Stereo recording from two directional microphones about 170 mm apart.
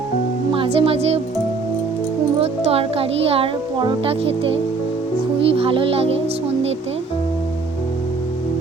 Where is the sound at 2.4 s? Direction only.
35° right (ahead or behind).